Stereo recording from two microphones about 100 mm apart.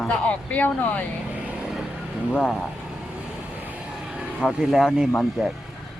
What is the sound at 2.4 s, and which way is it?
Speech, centre (ahead or behind).